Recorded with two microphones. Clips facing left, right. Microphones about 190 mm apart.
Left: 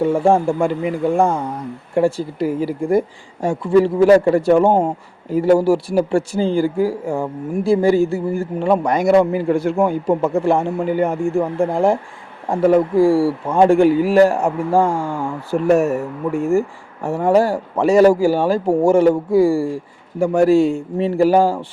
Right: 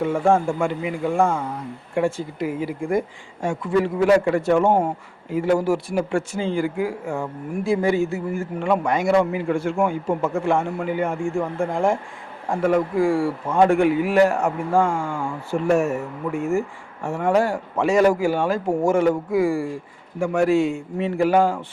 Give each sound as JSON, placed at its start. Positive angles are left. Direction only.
{"t": 0.0, "sound": "speech", "side_deg": 35}